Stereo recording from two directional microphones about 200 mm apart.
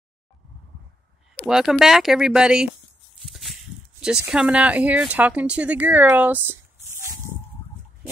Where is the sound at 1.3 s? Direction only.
5° right (ahead or behind).